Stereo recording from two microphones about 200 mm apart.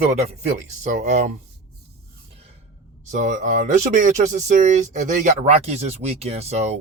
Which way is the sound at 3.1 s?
40° right (ahead or behind).